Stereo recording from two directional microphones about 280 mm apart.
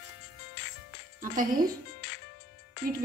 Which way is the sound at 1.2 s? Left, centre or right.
Right.